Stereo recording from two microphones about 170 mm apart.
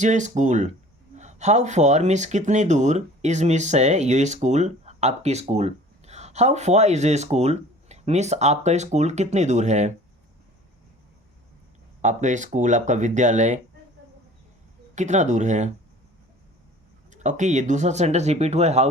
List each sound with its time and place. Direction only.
0.0 s speech: 45° right (ahead or behind)
12.0 s speech: 45° right (ahead or behind)
14.9 s speech: 45° right (ahead or behind)
17.1 s speech: 45° right (ahead or behind)